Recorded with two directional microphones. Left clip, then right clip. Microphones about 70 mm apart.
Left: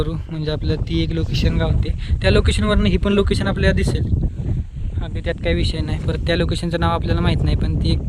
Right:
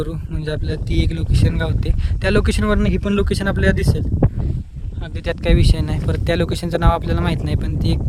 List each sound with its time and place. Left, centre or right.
0.0 s speech: right
1.3 s speech: right
2.2 s speech: right
2.8 s speech: centre
3.2 s speech: right
5.4 s speech: right
5.6 s speech: right